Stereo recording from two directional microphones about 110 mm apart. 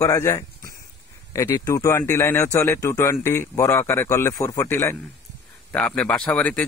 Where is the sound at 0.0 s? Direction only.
25° left (ahead or behind).